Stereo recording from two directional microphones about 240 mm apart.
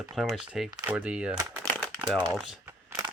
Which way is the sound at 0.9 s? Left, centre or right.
Centre.